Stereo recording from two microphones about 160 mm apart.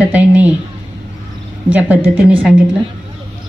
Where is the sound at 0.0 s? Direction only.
10° right (ahead or behind).